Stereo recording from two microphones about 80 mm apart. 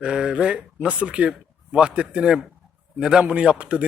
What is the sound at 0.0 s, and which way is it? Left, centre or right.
Speech, centre.